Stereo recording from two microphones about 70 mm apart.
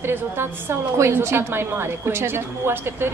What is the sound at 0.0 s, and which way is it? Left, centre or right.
A woman's voice, right.